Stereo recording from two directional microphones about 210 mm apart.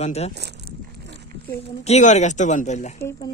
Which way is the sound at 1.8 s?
35° left (ahead or behind).